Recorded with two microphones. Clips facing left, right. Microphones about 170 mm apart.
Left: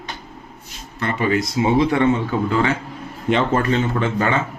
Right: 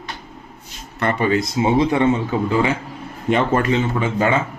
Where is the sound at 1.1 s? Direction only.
25° right (ahead or behind).